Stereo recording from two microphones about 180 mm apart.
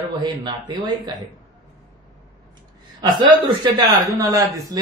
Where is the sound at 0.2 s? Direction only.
25° right (ahead or behind).